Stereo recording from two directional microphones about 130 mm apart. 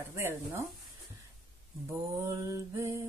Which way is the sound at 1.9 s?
25° right (ahead or behind).